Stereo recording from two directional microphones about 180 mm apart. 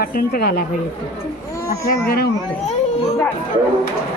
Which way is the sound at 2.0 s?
55° left (ahead or behind).